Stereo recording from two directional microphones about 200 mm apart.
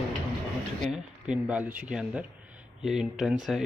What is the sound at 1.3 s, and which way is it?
Speech, 5° right (ahead or behind).